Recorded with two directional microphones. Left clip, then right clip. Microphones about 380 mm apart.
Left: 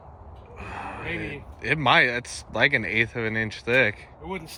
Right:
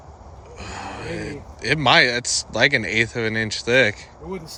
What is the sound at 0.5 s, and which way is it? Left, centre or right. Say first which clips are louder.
Speech: right 2 dB; centre.